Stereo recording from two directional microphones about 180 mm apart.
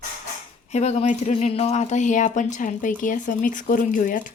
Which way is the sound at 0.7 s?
40° left (ahead or behind).